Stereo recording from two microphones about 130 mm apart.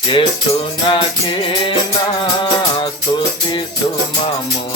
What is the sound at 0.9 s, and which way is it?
Music, 40° left (ahead or behind).